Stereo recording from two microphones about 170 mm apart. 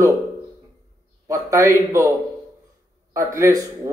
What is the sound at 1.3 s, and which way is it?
Speech, 20° right (ahead or behind).